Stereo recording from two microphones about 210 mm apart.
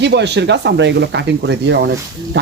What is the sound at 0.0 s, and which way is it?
A man's voice, 55° right (ahead or behind).